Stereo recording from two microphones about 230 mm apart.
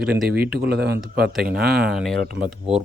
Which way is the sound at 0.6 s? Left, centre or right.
Right.